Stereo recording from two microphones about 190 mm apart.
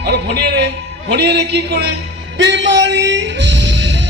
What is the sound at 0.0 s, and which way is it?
A man's voice, 55° right (ahead or behind).